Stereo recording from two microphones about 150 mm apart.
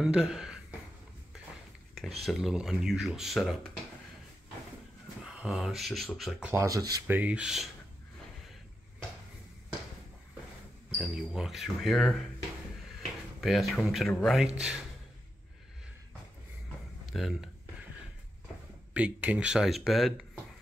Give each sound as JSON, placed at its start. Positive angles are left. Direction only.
{"t": 0.0, "sound": "a sound", "side_deg": -5}
{"t": 2.2, "sound": "speech", "side_deg": 0}
{"t": 5.2, "sound": "speech", "side_deg": -5}
{"t": 6.5, "sound": "speech", "side_deg": -20}
{"t": 7.1, "sound": "speech", "side_deg": -10}
{"t": 11.0, "sound": "speech", "side_deg": 0}
{"t": 13.4, "sound": "speech", "side_deg": 0}
{"t": 17.1, "sound": "speech", "side_deg": 0}
{"t": 18.9, "sound": "speech", "side_deg": -10}